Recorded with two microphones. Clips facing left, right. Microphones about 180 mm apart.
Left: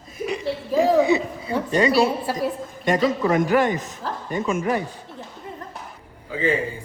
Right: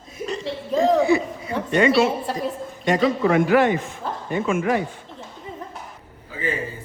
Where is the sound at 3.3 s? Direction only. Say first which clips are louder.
Right 3 dB; 40° left (ahead or behind).